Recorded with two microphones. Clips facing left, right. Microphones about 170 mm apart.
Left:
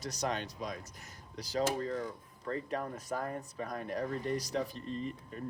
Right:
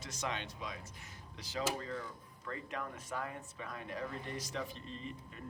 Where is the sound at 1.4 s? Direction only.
40° left (ahead or behind).